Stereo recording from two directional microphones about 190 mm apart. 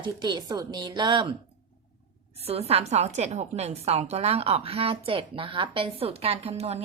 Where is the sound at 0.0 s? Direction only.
20° right (ahead or behind).